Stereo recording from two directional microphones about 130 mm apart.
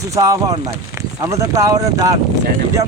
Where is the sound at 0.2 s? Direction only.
25° right (ahead or behind).